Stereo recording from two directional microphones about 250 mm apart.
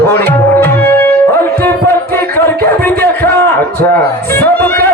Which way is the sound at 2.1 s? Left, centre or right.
Centre.